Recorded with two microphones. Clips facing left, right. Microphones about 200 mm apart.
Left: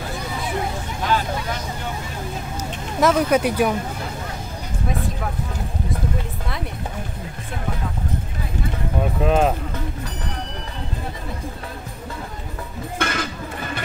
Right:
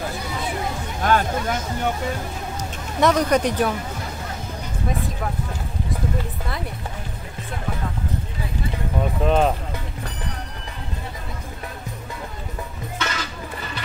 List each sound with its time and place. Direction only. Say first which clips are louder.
1.0 s speech: right 3 dB; 50° right (ahead or behind)
3.0 s speech: left 1 dB; 5° left (ahead or behind)
9.2 s speech: left 1 dB; 5° left (ahead or behind)
13.0 s music: left 4 dB; 50° left (ahead or behind)